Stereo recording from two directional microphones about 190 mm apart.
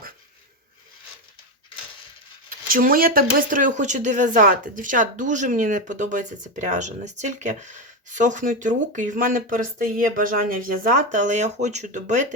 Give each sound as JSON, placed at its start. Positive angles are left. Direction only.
{"t": 2.6, "sound": "speech", "side_deg": -50}